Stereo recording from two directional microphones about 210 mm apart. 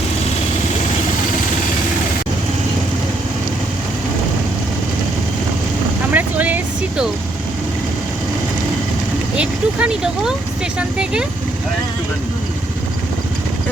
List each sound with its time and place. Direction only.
6.1 s vehicle: 10° right (ahead or behind)
9.4 s speech: 5° right (ahead or behind)